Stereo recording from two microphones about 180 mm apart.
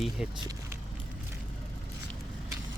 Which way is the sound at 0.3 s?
20° right (ahead or behind).